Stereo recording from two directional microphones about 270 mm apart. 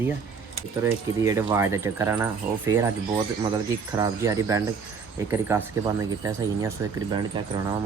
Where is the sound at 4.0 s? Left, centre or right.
Centre.